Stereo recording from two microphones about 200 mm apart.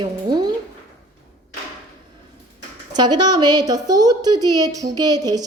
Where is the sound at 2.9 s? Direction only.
20° right (ahead or behind).